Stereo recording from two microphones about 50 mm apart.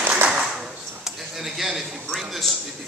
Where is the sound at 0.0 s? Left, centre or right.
Right.